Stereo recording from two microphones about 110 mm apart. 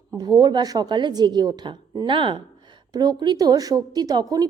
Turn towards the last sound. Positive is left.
turn(degrees=-35)  # may be behind; listen again after turning